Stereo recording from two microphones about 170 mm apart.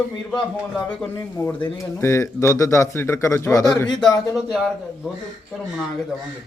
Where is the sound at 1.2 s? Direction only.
15° left (ahead or behind).